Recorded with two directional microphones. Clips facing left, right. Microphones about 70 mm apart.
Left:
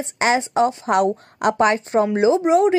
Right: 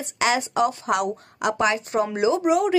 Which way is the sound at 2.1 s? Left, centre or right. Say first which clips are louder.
Left 4 dB; left.